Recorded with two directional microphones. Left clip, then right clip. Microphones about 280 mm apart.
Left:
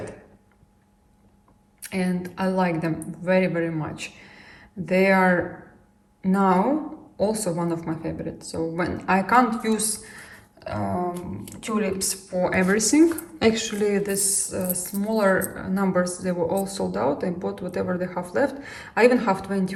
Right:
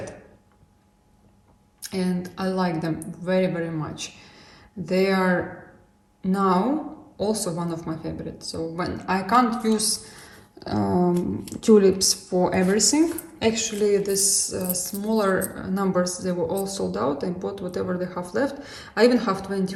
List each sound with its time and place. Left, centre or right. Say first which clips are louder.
1.8 s a woman's voice: even; centre
11.6 s speech: right 10 dB; right
12.4 s a woman's voice: left 1 dB; centre